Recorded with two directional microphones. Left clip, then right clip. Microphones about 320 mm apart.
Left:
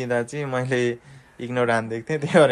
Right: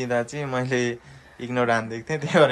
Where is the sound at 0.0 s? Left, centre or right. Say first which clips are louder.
Left 1 dB; centre.